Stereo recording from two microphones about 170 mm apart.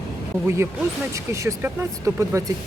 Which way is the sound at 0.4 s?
15° right (ahead or behind).